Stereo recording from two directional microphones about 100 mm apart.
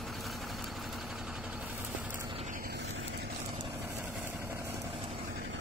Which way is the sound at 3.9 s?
20° right (ahead or behind).